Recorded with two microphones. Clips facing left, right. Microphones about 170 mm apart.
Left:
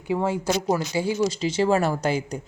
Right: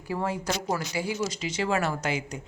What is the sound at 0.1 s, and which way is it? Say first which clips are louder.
Speech: left 6 dB; 20° left (ahead or behind).